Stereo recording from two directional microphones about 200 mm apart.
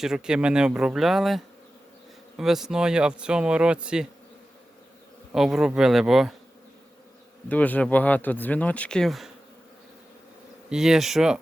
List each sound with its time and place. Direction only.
0.0 s speech: 5° right (ahead or behind)
5.3 s speech: centre (ahead or behind)
7.4 s speech: 10° left (ahead or behind)
10.7 s speech: centre (ahead or behind)